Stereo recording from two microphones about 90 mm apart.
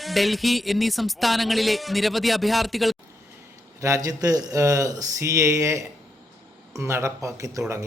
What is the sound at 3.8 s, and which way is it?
Speech, 40° right (ahead or behind).